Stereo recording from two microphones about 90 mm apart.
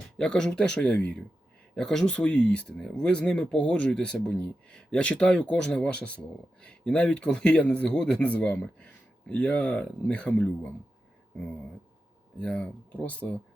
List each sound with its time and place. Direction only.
0.2 s speech: 10° left (ahead or behind)
12.4 s speech: 10° left (ahead or behind)